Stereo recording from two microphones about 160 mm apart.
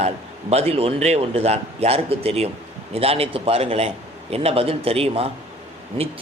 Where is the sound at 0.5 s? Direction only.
40° right (ahead or behind).